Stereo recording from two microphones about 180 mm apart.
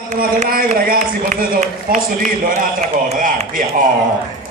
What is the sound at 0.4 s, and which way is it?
A man's voice, 55° right (ahead or behind).